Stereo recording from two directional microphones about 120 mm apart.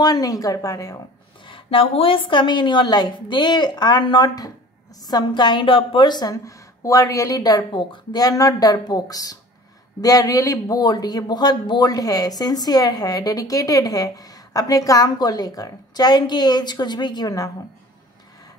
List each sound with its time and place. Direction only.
0.0 s a woman's voice: 30° left (ahead or behind)
1.5 s a man's voice: 45° left (ahead or behind); by 17.5 s 30° left (ahead or behind)